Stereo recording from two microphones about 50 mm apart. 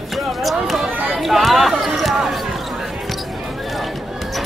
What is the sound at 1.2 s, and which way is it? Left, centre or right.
Basketball bounce, centre.